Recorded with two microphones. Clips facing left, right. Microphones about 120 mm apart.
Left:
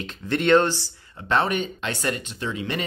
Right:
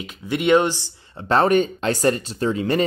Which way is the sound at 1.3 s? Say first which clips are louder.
Right 6 dB; 40° right (ahead or behind).